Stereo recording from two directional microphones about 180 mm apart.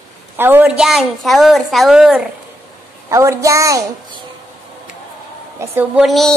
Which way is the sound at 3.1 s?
15° right (ahead or behind).